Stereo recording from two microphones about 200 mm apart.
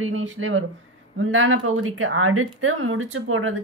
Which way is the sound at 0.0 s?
80° right.